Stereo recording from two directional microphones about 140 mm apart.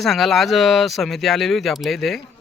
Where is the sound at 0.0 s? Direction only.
Centre (ahead or behind).